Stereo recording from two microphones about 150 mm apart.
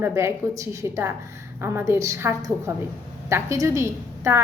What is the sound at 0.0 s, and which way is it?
A woman's voice, 20° right (ahead or behind).